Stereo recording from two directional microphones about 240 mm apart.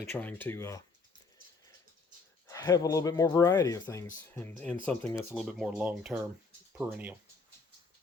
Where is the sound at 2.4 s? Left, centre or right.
Centre.